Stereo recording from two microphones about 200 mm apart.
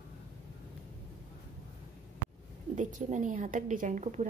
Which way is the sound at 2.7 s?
40° right (ahead or behind).